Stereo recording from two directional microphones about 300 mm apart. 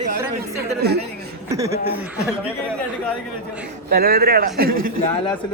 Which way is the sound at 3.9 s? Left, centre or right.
Right.